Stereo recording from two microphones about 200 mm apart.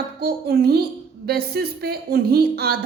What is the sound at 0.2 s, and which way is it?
A woman's voice, 50° right (ahead or behind).